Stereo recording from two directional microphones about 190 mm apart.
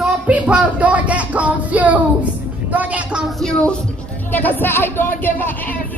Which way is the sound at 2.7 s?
10° right (ahead or behind).